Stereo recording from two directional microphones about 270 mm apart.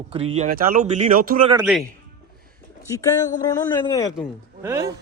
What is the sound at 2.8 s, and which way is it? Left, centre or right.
Speech, centre.